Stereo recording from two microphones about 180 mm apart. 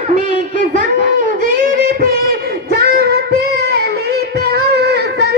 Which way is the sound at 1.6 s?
55° right (ahead or behind).